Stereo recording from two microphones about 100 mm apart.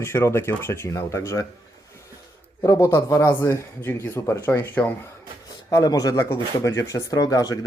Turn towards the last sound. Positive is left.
turn(degrees=35)  # may be behind; listen again after turning